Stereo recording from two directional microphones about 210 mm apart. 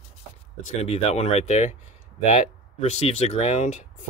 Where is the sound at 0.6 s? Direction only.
30° left (ahead or behind).